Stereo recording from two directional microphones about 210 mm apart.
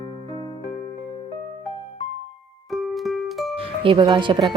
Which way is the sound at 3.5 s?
25° right (ahead or behind).